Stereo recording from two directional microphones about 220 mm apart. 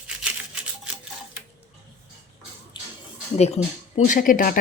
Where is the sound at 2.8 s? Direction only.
20° left (ahead or behind).